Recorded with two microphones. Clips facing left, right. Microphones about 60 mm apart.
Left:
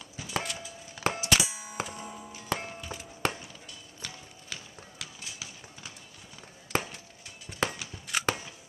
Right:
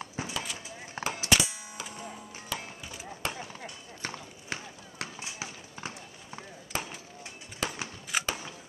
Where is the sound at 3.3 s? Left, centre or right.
Right.